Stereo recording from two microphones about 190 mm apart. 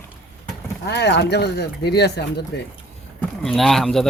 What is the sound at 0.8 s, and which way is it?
Speech, 60° left (ahead or behind).